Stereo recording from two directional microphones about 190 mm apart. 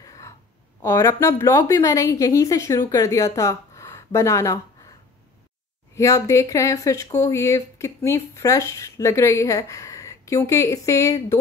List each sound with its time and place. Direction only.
0.0 s a sound: 20° left (ahead or behind)
0.8 s speech: 15° left (ahead or behind)
5.9 s speech: 15° left (ahead or behind)